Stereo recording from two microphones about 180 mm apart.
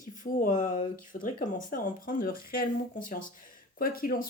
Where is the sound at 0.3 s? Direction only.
50° left (ahead or behind).